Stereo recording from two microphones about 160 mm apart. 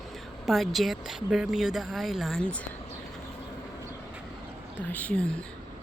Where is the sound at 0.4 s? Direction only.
Centre (ahead or behind).